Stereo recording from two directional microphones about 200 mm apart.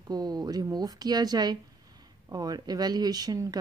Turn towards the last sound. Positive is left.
turn(degrees=-20)  # may be behind; listen again after turning